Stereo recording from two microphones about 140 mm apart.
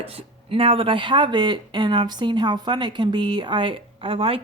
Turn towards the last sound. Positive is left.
turn(degrees=-40)  # may be behind; listen again after turning